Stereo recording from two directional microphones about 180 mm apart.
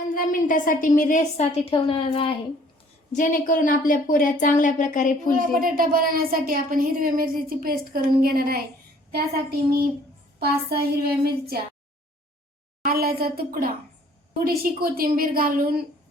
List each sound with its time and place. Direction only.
0.1 s a woman's voice: 50° left (ahead or behind); by 2.4 s 30° left (ahead or behind)
3.1 s a woman's voice: 45° left (ahead or behind)
5.4 s a woman's voice: 50° right (ahead or behind)
12.8 s a woman's voice: 55° right (ahead or behind)